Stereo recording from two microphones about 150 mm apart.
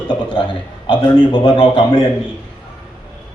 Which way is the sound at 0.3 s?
35° left (ahead or behind).